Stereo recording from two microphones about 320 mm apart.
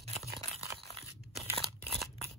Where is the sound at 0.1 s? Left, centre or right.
Centre.